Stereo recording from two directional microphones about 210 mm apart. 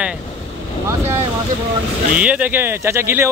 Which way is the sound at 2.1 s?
5° right (ahead or behind).